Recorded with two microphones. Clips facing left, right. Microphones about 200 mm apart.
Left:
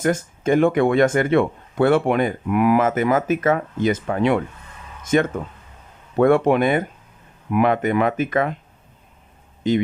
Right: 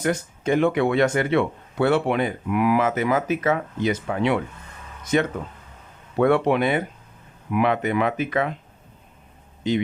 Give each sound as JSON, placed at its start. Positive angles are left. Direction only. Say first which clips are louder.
{"t": 0.0, "sound": "speech", "louder": "left 3 dB", "side_deg": 45}
{"t": 9.6, "sound": "speech", "louder": "left 3 dB", "side_deg": 50}